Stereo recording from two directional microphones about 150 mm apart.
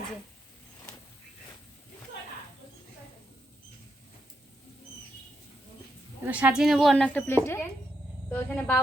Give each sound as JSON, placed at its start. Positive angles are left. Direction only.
{"t": 6.2, "sound": "a woman's voice", "side_deg": -10}